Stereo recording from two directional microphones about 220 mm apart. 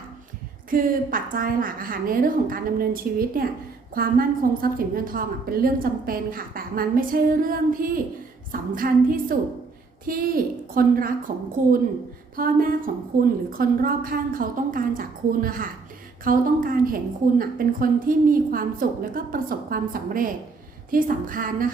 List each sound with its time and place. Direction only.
0.7 s a woman's voice: 40° right (ahead or behind)
12.4 s a woman's voice: 40° right (ahead or behind)